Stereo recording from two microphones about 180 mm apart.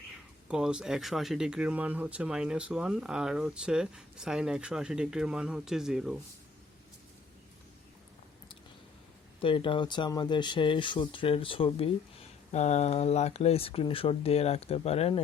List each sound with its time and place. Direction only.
0.4 s speech: 5° right (ahead or behind)
9.4 s speech: 30° left (ahead or behind)
12.5 s speech: 40° left (ahead or behind)